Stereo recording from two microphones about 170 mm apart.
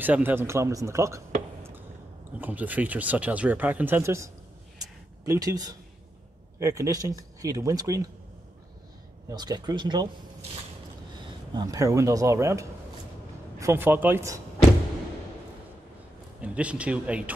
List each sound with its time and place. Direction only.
0.0 s speech: 10° right (ahead or behind)
2.4 s speech: 10° right (ahead or behind)
9.3 s speech: 25° right (ahead or behind)
11.5 s speech: 20° right (ahead or behind)
16.3 s speech: 5° right (ahead or behind)